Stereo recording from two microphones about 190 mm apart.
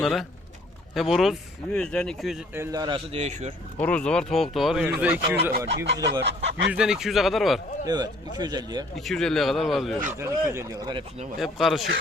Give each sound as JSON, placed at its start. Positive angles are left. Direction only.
{"t": 0.0, "sound": "speech", "side_deg": 0}
{"t": 2.6, "sound": "a man's voice", "side_deg": -20}
{"t": 3.2, "sound": "speech", "side_deg": -35}
{"t": 3.8, "sound": "speech", "side_deg": 5}
{"t": 5.4, "sound": "speech", "side_deg": -55}
{"t": 6.7, "sound": "speech", "side_deg": -5}
{"t": 7.9, "sound": "a man's voice", "side_deg": -20}
{"t": 9.0, "sound": "speech", "side_deg": 0}
{"t": 10.2, "sound": "speech", "side_deg": -15}
{"t": 11.3, "sound": "speech", "side_deg": 0}